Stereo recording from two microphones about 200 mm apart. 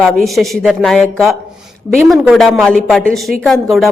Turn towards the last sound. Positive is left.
turn(degrees=0)  # may be behind; listen again after turning